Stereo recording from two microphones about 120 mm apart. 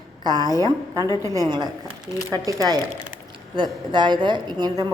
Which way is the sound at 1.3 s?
35° right (ahead or behind).